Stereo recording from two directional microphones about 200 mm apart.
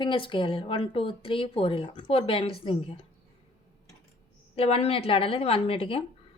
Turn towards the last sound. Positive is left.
turn(degrees=30)  # may be behind; listen again after turning